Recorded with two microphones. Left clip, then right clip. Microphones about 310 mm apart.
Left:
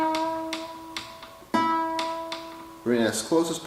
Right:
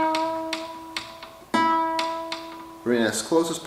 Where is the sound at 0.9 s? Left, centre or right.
Centre.